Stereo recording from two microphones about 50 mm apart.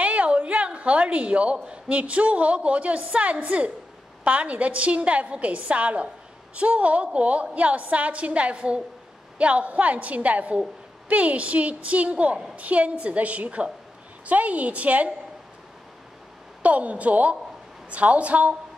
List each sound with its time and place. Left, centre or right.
0.0 s a woman's voice: right
16.6 s a woman's voice: right